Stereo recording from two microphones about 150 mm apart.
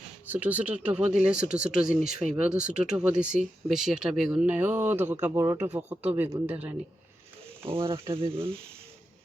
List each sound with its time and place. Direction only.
0.3 s speech: 10° right (ahead or behind)
7.6 s speech: 40° right (ahead or behind)